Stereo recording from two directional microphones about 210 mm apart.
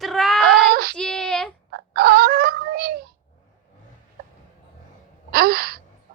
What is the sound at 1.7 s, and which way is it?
Fowl, 50° right (ahead or behind).